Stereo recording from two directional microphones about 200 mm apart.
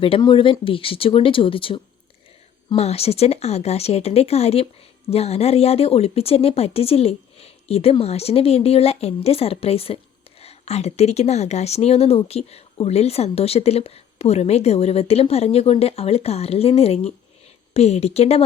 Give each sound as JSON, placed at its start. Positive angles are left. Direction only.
{"t": 0.0, "sound": "a woman's voice", "side_deg": 25}